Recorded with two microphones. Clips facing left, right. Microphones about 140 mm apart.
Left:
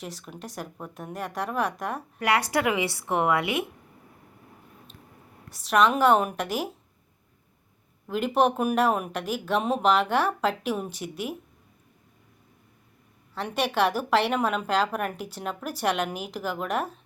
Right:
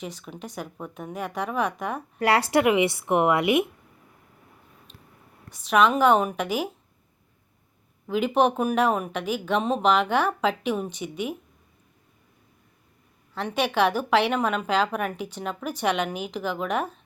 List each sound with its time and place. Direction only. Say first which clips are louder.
0.0 s a woman's voice: right 2 dB; centre (ahead or behind)
2.1 s speech: right 4 dB; 30° right (ahead or behind)
5.5 s a woman's voice: right 1 dB; centre (ahead or behind)
8.0 s a woman's voice: right 2 dB; centre (ahead or behind)
13.3 s a woman's voice: right 2 dB; centre (ahead or behind)